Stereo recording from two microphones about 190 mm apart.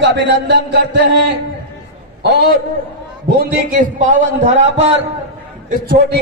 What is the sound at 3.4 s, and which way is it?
A man's voice, 50° right (ahead or behind).